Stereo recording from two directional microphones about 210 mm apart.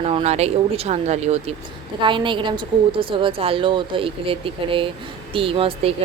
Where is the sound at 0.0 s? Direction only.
30° right (ahead or behind).